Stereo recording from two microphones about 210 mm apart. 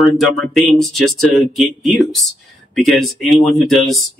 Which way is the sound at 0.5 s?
Centre (ahead or behind).